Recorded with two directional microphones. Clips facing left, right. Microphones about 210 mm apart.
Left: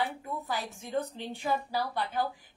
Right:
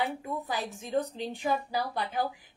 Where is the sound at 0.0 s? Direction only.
20° right (ahead or behind).